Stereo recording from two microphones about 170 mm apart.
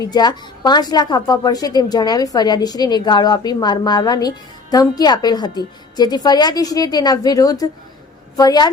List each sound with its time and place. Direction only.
0.0 s a woman's voice: 25° left (ahead or behind)